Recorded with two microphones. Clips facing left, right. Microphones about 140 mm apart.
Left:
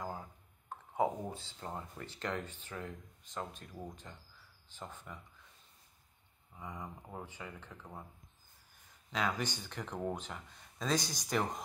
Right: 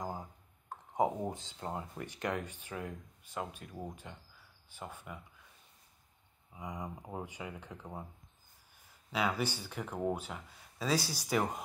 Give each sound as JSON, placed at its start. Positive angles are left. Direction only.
{"t": 0.0, "sound": "a sound", "side_deg": -15}
{"t": 1.2, "sound": "speech", "side_deg": -20}
{"t": 6.5, "sound": "speech", "side_deg": -15}
{"t": 9.1, "sound": "speech", "side_deg": -10}